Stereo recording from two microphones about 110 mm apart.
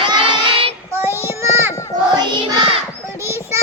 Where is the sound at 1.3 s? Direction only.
25° right (ahead or behind).